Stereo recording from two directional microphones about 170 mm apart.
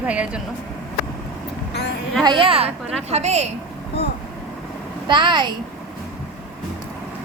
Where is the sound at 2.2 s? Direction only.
30° right (ahead or behind).